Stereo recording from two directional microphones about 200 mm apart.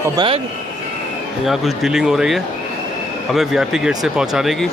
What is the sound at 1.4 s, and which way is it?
Speech, centre (ahead or behind).